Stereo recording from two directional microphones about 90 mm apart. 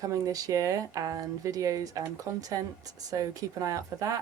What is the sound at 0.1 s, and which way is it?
Speech, 40° right (ahead or behind).